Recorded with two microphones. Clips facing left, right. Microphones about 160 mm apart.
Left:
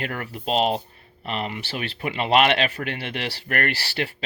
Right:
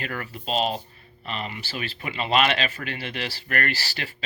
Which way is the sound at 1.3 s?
65° left (ahead or behind).